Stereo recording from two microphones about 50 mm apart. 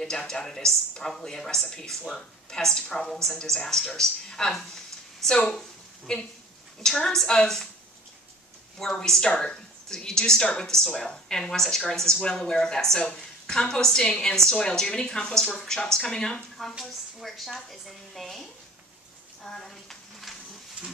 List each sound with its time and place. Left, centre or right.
0.0 s a woman's voice: centre
8.7 s a woman's voice: centre
19.4 s a sound: centre